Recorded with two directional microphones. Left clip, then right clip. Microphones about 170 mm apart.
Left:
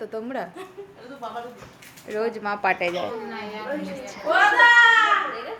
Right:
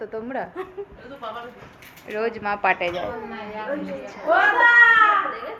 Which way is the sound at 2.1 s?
15° left (ahead or behind).